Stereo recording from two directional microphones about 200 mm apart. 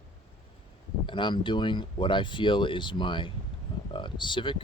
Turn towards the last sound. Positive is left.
turn(degrees=25)  # may be behind; listen again after turning